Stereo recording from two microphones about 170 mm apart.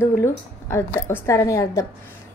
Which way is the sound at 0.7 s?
15° left (ahead or behind).